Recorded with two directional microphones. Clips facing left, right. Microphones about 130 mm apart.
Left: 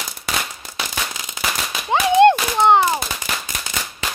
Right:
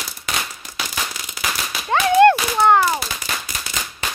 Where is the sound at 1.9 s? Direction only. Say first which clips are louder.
Even; 20° left (ahead or behind).